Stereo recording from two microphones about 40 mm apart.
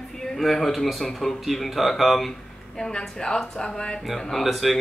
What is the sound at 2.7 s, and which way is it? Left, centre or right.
Speech, centre.